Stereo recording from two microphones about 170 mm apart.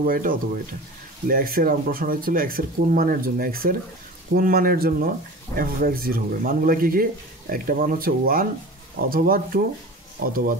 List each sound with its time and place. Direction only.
0.0 s speech: 55° right (ahead or behind)